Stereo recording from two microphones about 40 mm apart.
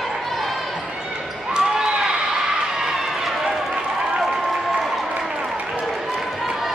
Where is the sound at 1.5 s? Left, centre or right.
Centre.